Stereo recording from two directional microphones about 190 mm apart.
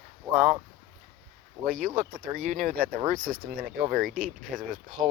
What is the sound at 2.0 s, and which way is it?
Speech, 45° right (ahead or behind).